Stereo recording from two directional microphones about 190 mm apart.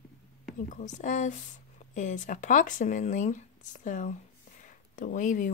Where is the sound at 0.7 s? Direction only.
40° left (ahead or behind).